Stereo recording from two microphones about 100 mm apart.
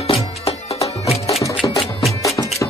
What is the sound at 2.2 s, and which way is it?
Music, 35° left (ahead or behind).